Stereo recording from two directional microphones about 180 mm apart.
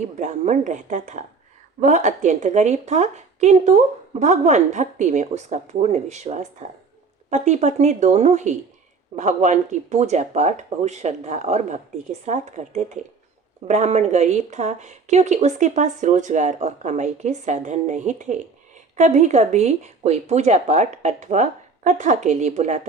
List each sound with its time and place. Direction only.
0.2 s speech: 40° right (ahead or behind)